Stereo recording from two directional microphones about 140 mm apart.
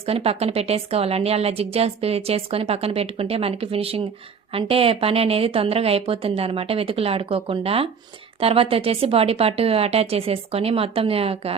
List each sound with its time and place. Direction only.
0.0 s a woman's voice: 45° right (ahead or behind)